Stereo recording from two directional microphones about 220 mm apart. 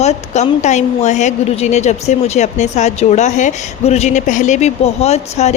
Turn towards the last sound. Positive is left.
turn(degrees=30)  # may be behind; listen again after turning